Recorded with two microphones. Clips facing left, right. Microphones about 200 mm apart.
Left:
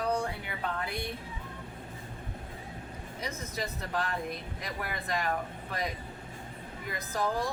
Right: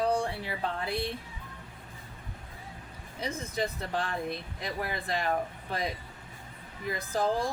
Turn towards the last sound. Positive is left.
turn(degrees=-30)  # may be behind; listen again after turning